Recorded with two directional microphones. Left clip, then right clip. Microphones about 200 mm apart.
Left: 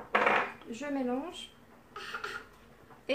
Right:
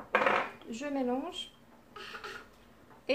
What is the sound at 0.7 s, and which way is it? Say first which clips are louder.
Speech: right 1 dB; 30° right (ahead or behind).